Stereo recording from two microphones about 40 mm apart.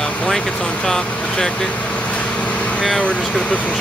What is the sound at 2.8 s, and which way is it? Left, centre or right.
Speech, centre.